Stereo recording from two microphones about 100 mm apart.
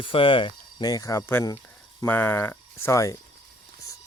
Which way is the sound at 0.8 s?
40° left (ahead or behind).